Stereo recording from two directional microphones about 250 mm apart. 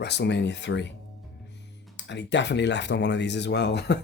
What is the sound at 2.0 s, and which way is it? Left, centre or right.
Speech, left.